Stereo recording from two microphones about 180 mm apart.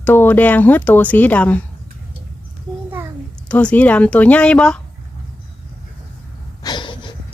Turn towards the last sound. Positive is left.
turn(degrees=25)  # may be behind; listen again after turning